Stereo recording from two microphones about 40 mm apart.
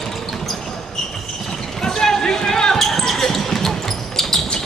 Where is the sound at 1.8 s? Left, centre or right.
Centre.